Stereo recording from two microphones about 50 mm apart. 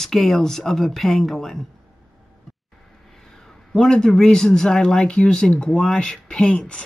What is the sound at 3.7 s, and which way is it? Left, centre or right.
Speech, centre.